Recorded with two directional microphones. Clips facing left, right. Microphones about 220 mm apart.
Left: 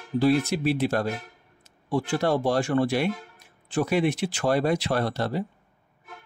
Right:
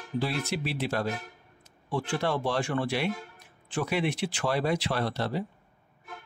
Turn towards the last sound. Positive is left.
turn(degrees=45)  # may be behind; listen again after turning